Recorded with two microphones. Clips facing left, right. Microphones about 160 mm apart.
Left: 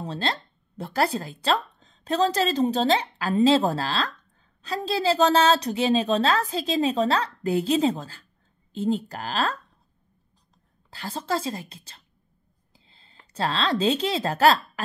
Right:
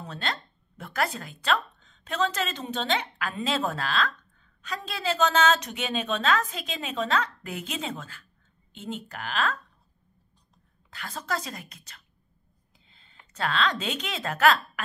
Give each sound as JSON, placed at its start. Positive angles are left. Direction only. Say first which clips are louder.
{"t": 0.0, "sound": "speech", "louder": "left 5 dB", "side_deg": 30}
{"t": 10.9, "sound": "a woman's voice", "louder": "left 5 dB", "side_deg": 30}